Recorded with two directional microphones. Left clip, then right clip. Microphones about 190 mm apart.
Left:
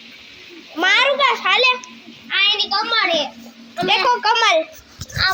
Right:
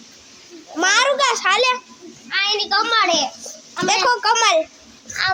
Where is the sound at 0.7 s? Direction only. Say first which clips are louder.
Left 1 dB; 15° right (ahead or behind).